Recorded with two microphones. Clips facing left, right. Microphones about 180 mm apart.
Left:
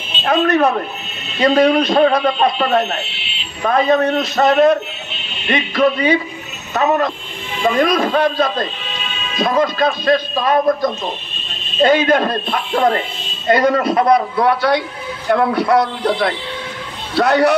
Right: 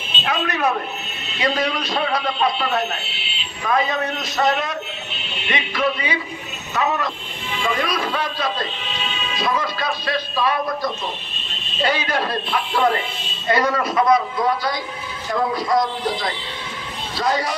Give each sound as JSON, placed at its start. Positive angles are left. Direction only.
{"t": 0.2, "sound": "a man's voice", "side_deg": 50}